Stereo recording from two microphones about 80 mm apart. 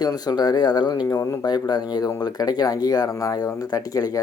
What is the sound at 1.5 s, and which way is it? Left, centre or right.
Speech, left.